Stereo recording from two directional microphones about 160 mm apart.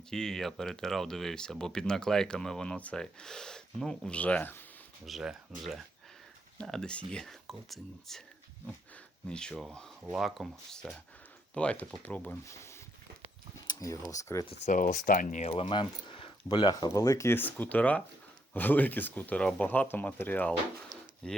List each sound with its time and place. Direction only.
0.1 s speech: 5° left (ahead or behind)
5.0 s speech: centre (ahead or behind)
9.3 s speech: 5° left (ahead or behind)
13.7 s a sound: 20° left (ahead or behind)
14.4 s speech: 45° left (ahead or behind); by 20.6 s 10° left (ahead or behind)